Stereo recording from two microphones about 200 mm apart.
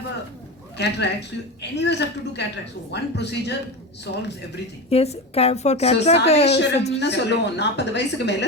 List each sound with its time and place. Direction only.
0.8 s a woman's voice: 60° left (ahead or behind)
4.9 s a woman's voice: 30° left (ahead or behind)
6.6 s a woman's voice: 60° left (ahead or behind)